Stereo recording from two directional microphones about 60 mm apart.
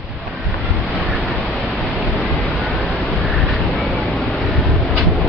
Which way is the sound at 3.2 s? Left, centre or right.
Right.